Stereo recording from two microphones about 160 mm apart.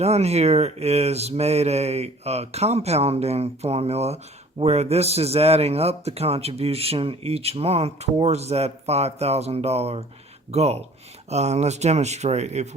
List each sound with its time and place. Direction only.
0.0 s a man's voice: 40° right (ahead or behind)